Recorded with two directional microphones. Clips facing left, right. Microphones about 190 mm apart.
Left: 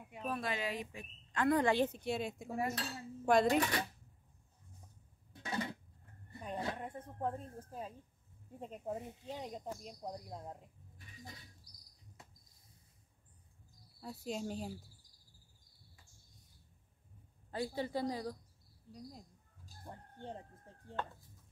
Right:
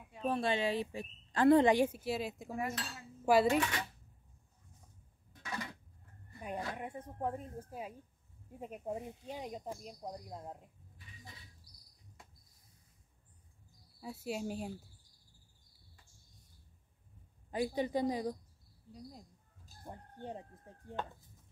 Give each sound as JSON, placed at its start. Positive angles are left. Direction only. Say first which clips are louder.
{"t": 0.2, "sound": "a woman's voice", "louder": "right 6 dB", "side_deg": -30}
{"t": 1.7, "sound": "speech", "louder": "right 3 dB", "side_deg": -10}
{"t": 2.5, "sound": "cutlery", "louder": "left 3 dB", "side_deg": 35}
{"t": 3.3, "sound": "speech", "louder": "right 2 dB", "side_deg": -5}
{"t": 3.5, "sound": "cutlery", "louder": "even", "side_deg": 35}
{"t": 5.3, "sound": "a sound", "louder": "left 4 dB", "side_deg": 30}
{"t": 6.8, "sound": "speech", "louder": "right 1 dB", "side_deg": -10}
{"t": 14.0, "sound": "speech", "louder": "right 2 dB", "side_deg": -5}
{"t": 17.5, "sound": "speech", "louder": "right 4 dB", "side_deg": -15}
{"t": 19.8, "sound": "speech", "louder": "right 3 dB", "side_deg": -15}